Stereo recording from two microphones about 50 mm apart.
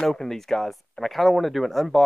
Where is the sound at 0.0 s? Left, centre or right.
Centre.